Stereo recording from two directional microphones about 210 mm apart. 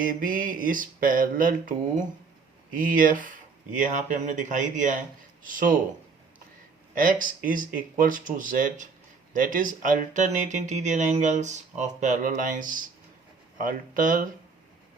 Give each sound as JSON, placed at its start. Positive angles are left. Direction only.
{"t": 0.0, "sound": "speech", "side_deg": -40}
{"t": 6.9, "sound": "speech", "side_deg": -40}